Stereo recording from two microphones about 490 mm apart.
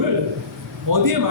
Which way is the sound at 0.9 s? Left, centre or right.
Right.